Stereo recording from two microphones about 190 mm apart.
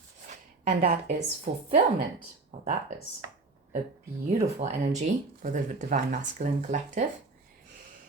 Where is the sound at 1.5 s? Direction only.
60° right (ahead or behind).